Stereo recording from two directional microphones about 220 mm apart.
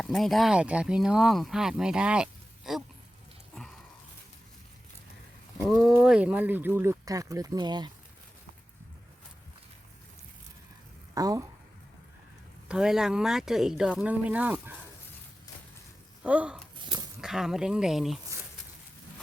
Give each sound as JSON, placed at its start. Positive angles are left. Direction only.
{"t": 0.0, "sound": "speech", "side_deg": 0}
{"t": 3.5, "sound": "a sound", "side_deg": 0}
{"t": 5.6, "sound": "speech", "side_deg": 0}
{"t": 11.1, "sound": "speech", "side_deg": -15}
{"t": 12.6, "sound": "speech", "side_deg": -5}
{"t": 16.2, "sound": "speech", "side_deg": -5}
{"t": 16.8, "sound": "a sound", "side_deg": -20}
{"t": 17.2, "sound": "speech", "side_deg": 0}